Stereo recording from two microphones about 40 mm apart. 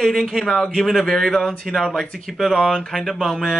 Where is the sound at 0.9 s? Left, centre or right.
Centre.